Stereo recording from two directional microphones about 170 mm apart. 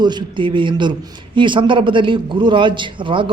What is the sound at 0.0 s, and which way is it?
A man's voice, 25° right (ahead or behind).